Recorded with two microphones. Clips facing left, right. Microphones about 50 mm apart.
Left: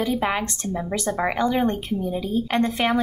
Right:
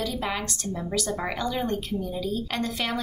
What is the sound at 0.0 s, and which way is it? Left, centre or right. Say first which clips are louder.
Speech: left 6 dB; left.